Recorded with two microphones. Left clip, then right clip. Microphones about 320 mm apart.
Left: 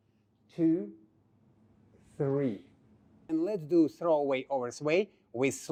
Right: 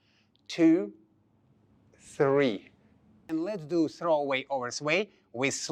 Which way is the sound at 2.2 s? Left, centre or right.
Centre.